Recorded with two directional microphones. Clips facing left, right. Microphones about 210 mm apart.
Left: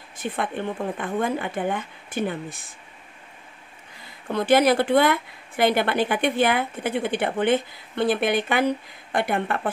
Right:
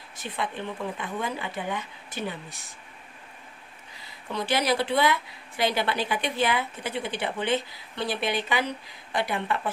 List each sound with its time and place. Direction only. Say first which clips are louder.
0.2 s a woman's voice: left 5 dB; 55° left (ahead or behind)
4.0 s a woman's voice: left 6 dB; 50° left (ahead or behind)